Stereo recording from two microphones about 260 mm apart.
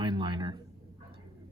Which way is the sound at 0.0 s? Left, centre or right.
Centre.